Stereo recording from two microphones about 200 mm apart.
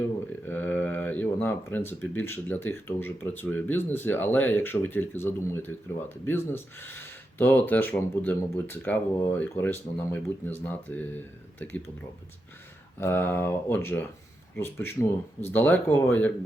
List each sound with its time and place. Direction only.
0.4 s speech: 10° left (ahead or behind)
13.0 s speech: 10° left (ahead or behind)